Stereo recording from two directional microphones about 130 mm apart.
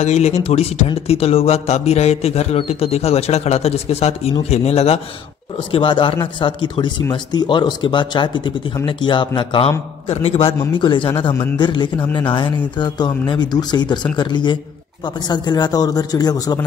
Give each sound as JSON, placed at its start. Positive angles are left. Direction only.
{"t": 0.0, "sound": "a man's voice", "side_deg": 60}
{"t": 10.0, "sound": "a man's voice", "side_deg": 50}
{"t": 10.8, "sound": "speech", "side_deg": 40}